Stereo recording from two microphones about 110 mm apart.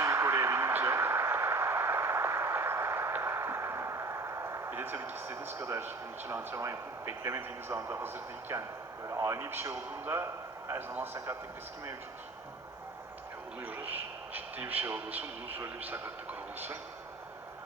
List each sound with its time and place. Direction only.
0.0 s a sound: 25° right (ahead or behind)
9.0 s a man's voice: 25° right (ahead or behind)
13.6 s speech: 15° right (ahead or behind)